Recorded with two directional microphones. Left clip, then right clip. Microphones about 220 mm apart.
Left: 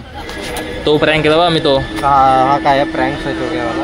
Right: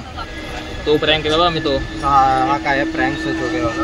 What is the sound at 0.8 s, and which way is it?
Speech, 30° left (ahead or behind).